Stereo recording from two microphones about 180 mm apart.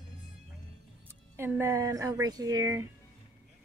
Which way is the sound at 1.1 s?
15° right (ahead or behind).